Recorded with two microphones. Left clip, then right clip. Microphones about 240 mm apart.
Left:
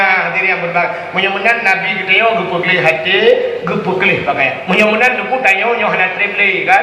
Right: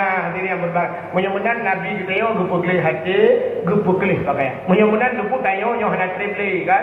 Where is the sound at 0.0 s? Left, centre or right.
Left.